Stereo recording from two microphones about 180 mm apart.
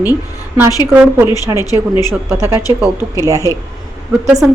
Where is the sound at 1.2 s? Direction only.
20° left (ahead or behind).